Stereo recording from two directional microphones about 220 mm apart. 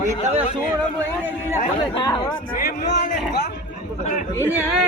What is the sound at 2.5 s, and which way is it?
Speech, 40° left (ahead or behind).